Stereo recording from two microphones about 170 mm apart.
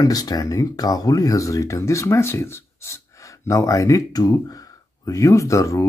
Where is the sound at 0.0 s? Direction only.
20° left (ahead or behind).